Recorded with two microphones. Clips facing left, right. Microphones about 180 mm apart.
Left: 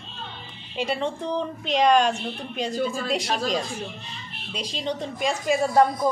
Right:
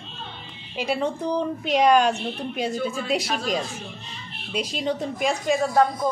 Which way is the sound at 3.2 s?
35° left (ahead or behind).